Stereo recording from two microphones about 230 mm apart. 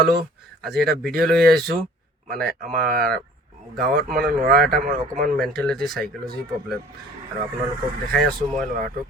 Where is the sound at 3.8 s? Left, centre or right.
Right.